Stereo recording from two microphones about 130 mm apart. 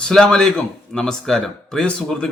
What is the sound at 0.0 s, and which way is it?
Speech, 5° left (ahead or behind).